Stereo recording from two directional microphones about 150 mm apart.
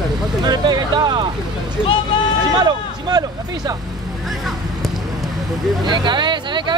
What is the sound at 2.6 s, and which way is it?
Speech, 25° right (ahead or behind).